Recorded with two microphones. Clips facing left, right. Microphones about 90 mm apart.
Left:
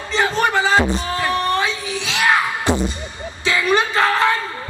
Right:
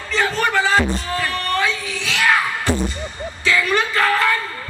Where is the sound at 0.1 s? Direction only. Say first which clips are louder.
Left 1 dB; 20° left (ahead or behind).